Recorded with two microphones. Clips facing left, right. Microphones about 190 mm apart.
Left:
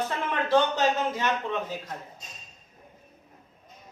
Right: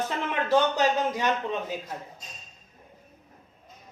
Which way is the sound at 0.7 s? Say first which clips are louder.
Right 1 dB; 15° right (ahead or behind).